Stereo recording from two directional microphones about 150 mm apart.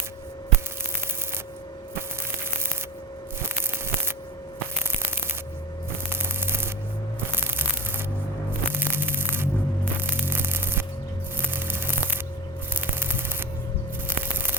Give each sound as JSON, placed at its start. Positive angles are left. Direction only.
{"t": 3.4, "sound": "a sound", "side_deg": -15}
{"t": 6.1, "sound": "spray", "side_deg": -15}
{"t": 7.3, "sound": "rub", "side_deg": -15}
{"t": 8.7, "sound": "music", "side_deg": -15}
{"t": 12.7, "sound": "spray", "side_deg": -15}
{"t": 14.1, "sound": "music", "side_deg": -15}